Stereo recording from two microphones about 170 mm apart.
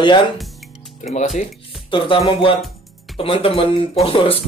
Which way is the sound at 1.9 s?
30° left (ahead or behind).